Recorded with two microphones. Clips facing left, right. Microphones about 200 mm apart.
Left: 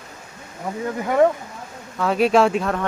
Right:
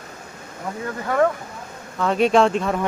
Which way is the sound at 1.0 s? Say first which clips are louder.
Left 3 dB; 20° left (ahead or behind).